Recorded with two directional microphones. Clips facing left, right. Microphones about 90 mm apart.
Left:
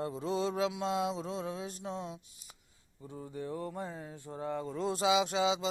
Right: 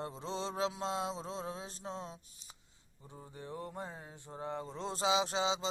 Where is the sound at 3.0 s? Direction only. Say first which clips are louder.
Left 7 dB; 20° right (ahead or behind).